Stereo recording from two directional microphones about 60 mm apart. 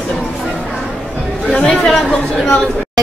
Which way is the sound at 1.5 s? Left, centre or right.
Centre.